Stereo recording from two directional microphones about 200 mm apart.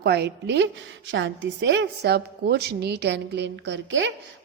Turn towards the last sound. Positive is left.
turn(degrees=-65)  # may be behind; listen again after turning